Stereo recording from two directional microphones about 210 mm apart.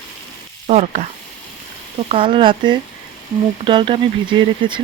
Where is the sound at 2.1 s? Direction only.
25° right (ahead or behind).